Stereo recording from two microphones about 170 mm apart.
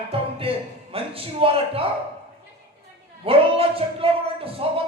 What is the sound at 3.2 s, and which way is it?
Speech, 35° right (ahead or behind).